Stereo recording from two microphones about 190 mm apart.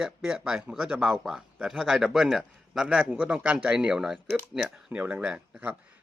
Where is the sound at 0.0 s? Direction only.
5° right (ahead or behind).